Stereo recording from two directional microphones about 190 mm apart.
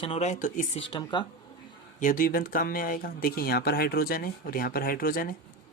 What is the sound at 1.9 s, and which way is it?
Speech, 45° left (ahead or behind).